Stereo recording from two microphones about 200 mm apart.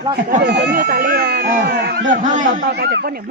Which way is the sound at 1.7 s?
55° right (ahead or behind).